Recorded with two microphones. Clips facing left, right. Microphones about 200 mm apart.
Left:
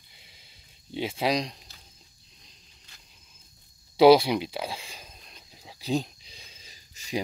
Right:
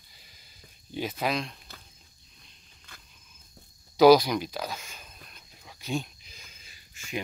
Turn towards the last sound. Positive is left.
turn(degrees=35)  # may be behind; listen again after turning